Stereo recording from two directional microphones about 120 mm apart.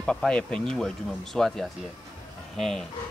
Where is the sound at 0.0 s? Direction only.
5° left (ahead or behind).